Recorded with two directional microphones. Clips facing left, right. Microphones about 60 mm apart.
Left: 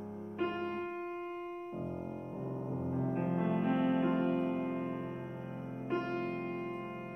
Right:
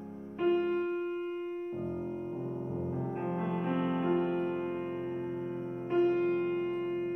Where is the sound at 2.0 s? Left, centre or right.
Centre.